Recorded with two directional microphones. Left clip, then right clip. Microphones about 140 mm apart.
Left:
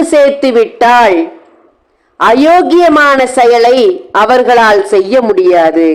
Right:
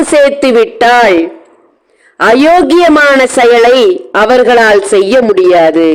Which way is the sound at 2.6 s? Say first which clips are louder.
Right 1 dB; 40° right (ahead or behind).